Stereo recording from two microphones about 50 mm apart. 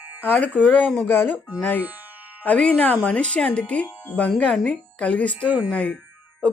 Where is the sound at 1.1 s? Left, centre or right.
Left.